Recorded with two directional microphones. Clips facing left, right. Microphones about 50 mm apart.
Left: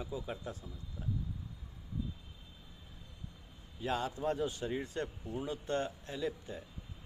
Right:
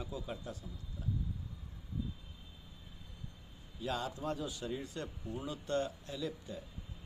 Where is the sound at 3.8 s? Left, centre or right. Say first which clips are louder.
Left 3 dB; left.